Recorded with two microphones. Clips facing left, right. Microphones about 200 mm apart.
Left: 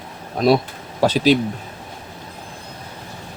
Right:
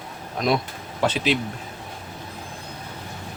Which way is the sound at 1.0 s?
35° left (ahead or behind).